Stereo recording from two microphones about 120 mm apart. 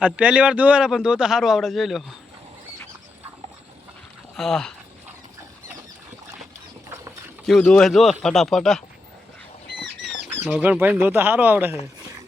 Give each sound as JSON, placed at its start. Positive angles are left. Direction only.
{"t": 0.0, "sound": "a man's voice", "side_deg": -10}
{"t": 4.4, "sound": "a man's voice", "side_deg": 5}
{"t": 7.6, "sound": "a man's voice", "side_deg": 5}
{"t": 10.0, "sound": "rodents", "side_deg": 0}
{"t": 10.6, "sound": "speech", "side_deg": -15}